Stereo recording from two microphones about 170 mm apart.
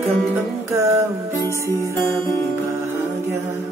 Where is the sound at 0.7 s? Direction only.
15° right (ahead or behind).